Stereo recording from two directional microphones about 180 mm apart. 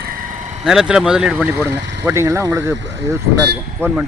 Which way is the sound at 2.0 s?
15° right (ahead or behind).